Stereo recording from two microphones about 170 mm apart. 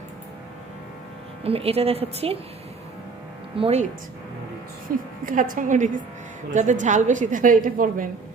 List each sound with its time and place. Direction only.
1.5 s a woman's voice: 35° right (ahead or behind)
3.5 s a woman's voice: 35° right (ahead or behind)
4.9 s a woman's voice: 55° right (ahead or behind)